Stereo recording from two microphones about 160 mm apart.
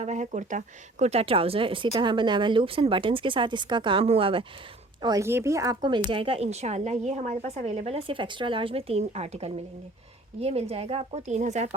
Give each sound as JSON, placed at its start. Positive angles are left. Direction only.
{"t": 0.0, "sound": "speech", "side_deg": -45}
{"t": 5.0, "sound": "speech", "side_deg": -20}